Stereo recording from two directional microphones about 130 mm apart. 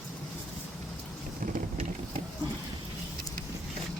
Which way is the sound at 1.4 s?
90° right.